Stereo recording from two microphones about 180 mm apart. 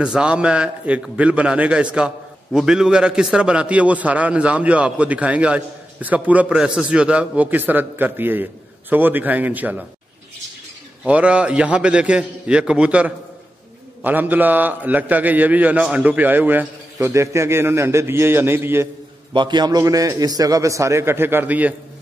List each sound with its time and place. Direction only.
0.0 s a man's voice: 5° right (ahead or behind)
11.1 s a man's voice: 5° right (ahead or behind)
19.3 s a man's voice: 25° right (ahead or behind); by 21.7 s 10° right (ahead or behind)